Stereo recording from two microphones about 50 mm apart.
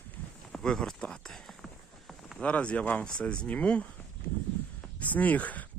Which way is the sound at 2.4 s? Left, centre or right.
Left.